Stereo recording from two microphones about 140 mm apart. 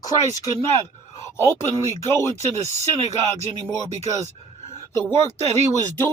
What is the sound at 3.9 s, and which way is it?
Speech, 50° right (ahead or behind).